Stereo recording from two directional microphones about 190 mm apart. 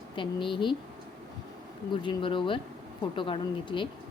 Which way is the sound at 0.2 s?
25° left (ahead or behind).